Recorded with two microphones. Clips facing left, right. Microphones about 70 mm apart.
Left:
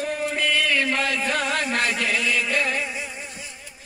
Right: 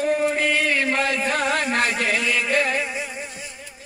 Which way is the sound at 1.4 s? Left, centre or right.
Right.